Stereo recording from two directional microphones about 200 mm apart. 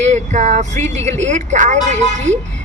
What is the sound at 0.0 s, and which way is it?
Speech, 35° right (ahead or behind).